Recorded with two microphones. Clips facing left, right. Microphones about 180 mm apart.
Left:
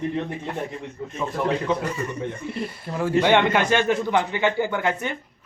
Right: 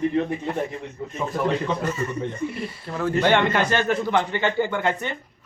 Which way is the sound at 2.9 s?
15° left (ahead or behind).